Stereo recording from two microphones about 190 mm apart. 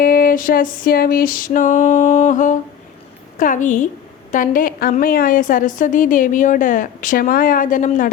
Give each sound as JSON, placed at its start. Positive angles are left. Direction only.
{"t": 0.0, "sound": "a woman's voice", "side_deg": 50}